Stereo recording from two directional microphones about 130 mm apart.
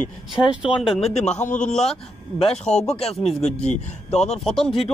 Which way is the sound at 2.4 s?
55° left (ahead or behind).